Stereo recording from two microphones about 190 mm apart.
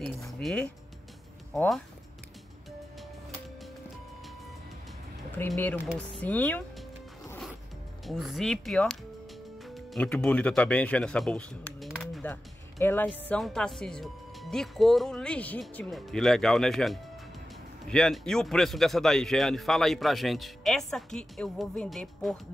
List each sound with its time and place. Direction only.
0.3 s speech: centre (ahead or behind)
5.5 s speech: 10° left (ahead or behind)
8.1 s a man's voice: centre (ahead or behind)